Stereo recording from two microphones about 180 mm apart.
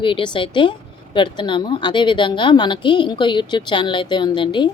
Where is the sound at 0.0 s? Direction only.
30° left (ahead or behind).